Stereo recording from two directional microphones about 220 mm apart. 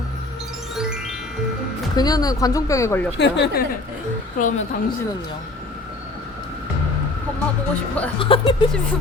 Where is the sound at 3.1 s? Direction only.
50° left (ahead or behind).